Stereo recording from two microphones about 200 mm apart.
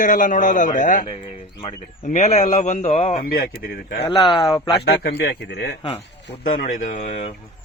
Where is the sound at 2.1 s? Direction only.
30° left (ahead or behind).